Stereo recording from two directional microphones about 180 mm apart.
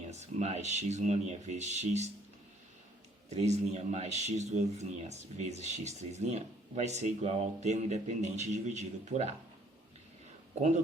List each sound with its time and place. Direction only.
0.1 s speech: 40° right (ahead or behind)
3.2 s speech: 40° right (ahead or behind)
10.5 s speech: 40° right (ahead or behind)